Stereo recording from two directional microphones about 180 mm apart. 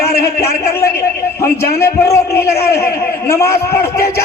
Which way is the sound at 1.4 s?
15° left (ahead or behind).